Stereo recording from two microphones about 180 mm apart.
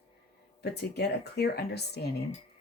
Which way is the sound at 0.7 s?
65° left (ahead or behind).